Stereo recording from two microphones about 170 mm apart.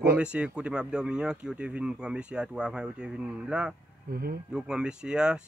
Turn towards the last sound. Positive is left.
turn(degrees=-5)  # may be behind; listen again after turning